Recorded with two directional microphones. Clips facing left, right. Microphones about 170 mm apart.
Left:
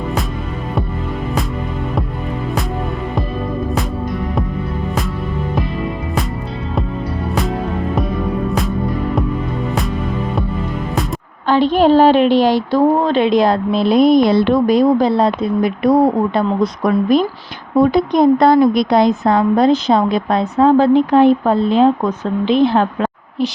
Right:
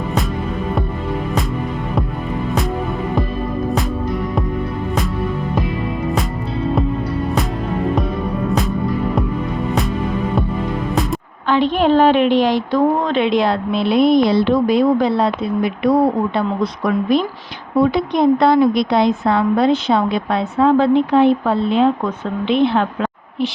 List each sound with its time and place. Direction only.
11.4 s a woman's voice: 35° left (ahead or behind)